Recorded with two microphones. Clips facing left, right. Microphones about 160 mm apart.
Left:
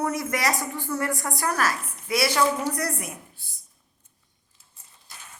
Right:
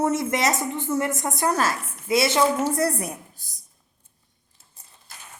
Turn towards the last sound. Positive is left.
turn(degrees=-35)  # may be behind; listen again after turning